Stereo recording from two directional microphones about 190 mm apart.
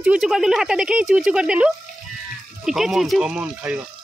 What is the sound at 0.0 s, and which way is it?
Speech, 5° right (ahead or behind).